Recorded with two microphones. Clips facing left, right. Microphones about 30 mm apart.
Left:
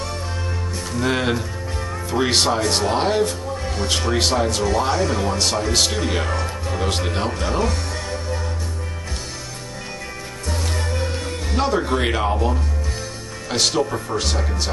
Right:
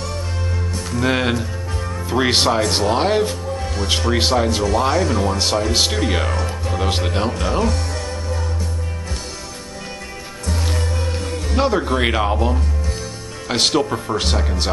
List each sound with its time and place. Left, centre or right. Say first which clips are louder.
0.9 s speech: right 2 dB; centre
1.3 s music: right 1 dB; centre
2.1 s speech: right 2 dB; centre
7.6 s music: right 2 dB; centre
10.5 s music: right 1 dB; centre
11.5 s speech: right 2 dB; centre
13.5 s speech: right 2 dB; right